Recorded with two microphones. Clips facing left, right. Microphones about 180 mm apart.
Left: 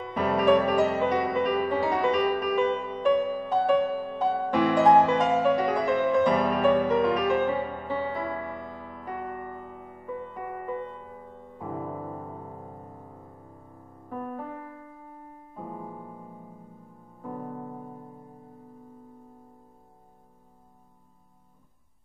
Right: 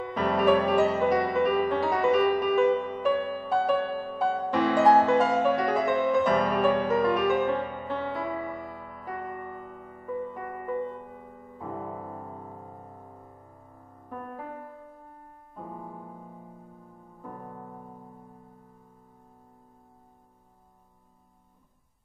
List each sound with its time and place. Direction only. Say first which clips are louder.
0.1 s music: left 1 dB; 5° left (ahead or behind)
14.0 s music: left 4 dB; centre (ahead or behind)
15.5 s piano: left 2 dB; 5° left (ahead or behind)
17.2 s music: left 6 dB; 5° left (ahead or behind)